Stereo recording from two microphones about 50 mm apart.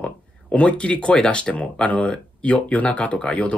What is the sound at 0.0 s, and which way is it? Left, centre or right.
Speech, left.